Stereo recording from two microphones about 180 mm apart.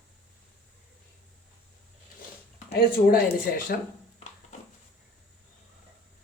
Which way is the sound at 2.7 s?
60° left (ahead or behind).